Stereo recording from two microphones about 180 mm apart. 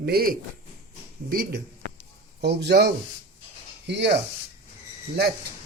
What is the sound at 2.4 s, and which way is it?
Speech, 65° right (ahead or behind).